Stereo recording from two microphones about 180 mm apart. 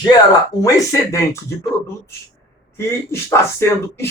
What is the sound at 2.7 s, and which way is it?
Speech, 15° left (ahead or behind).